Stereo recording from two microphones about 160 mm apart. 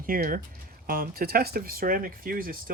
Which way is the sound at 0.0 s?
60° right (ahead or behind).